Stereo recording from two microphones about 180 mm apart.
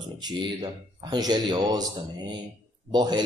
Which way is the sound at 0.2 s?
20° right (ahead or behind).